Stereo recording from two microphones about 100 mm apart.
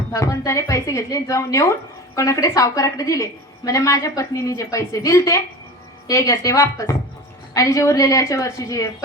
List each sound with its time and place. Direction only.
0.1 s a woman's voice: 30° left (ahead or behind)